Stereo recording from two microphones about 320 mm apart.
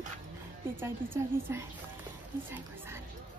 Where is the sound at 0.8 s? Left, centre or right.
Centre.